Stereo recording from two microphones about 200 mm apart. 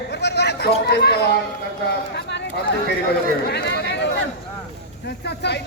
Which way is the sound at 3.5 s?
60° left (ahead or behind).